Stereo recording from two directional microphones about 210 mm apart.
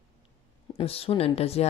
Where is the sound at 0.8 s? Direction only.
25° left (ahead or behind).